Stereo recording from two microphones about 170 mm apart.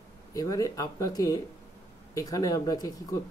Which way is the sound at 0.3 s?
20° left (ahead or behind).